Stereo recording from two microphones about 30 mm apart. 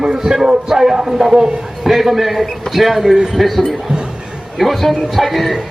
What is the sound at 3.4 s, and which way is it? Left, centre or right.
Speech, centre.